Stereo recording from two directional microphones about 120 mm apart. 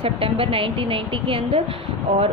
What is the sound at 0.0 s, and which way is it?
A woman's voice, 50° right (ahead or behind).